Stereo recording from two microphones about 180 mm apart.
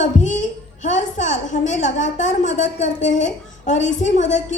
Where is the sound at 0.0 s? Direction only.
40° left (ahead or behind).